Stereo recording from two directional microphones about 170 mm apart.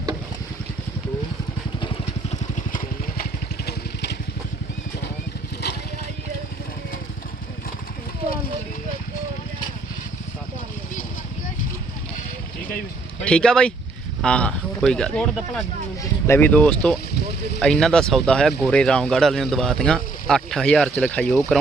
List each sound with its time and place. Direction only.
3.7 s vehicle: 75° left (ahead or behind)
13.2 s speech: 5° left (ahead or behind)